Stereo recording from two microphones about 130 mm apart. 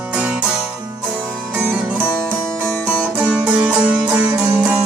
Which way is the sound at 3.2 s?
10° right (ahead or behind).